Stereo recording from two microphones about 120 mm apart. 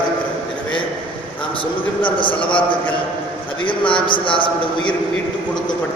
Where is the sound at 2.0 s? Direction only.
45° left (ahead or behind).